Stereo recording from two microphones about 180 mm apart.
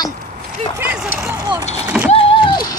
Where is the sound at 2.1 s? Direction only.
30° left (ahead or behind).